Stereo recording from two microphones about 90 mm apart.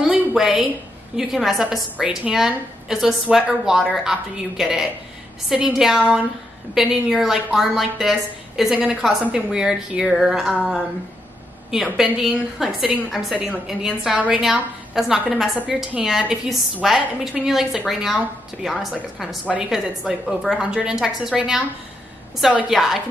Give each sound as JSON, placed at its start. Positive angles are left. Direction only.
{"t": 0.0, "sound": "a sound", "side_deg": -10}
{"t": 1.1, "sound": "a woman's voice", "side_deg": -5}
{"t": 8.7, "sound": "a woman's voice", "side_deg": -15}
{"t": 11.7, "sound": "a woman's voice", "side_deg": -5}
{"t": 14.1, "sound": "a woman's voice", "side_deg": -15}
{"t": 14.4, "sound": "a woman's voice", "side_deg": -5}
{"t": 22.7, "sound": "a woman's voice", "side_deg": 0}